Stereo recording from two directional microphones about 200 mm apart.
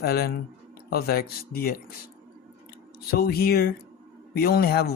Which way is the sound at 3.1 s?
50° left (ahead or behind).